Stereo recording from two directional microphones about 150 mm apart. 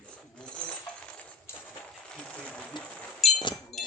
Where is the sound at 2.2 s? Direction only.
5° left (ahead or behind).